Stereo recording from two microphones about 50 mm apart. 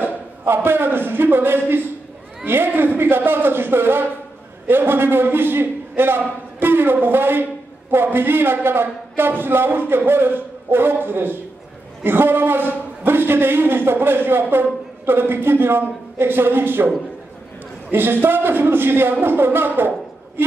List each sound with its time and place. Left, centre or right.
0.0 s a man's voice: right
17.9 s a man's voice: right
20.4 s a sound: right